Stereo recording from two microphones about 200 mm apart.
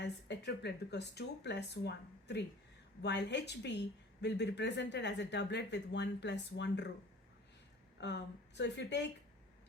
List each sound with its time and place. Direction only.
0.0 s speech: 60° left (ahead or behind)
8.0 s speech: 60° left (ahead or behind)